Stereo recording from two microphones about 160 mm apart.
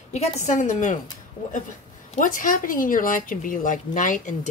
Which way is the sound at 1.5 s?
55° left (ahead or behind).